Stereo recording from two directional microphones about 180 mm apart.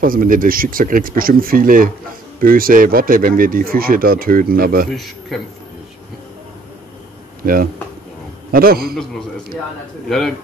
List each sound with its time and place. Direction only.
0.0 s speech: 50° right (ahead or behind)
4.8 s a man's voice: centre (ahead or behind)
7.4 s a man's voice: 55° right (ahead or behind)
10.0 s a man's voice: centre (ahead or behind)